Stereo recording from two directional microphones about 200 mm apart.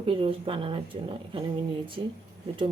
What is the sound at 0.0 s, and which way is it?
Speech, 25° right (ahead or behind).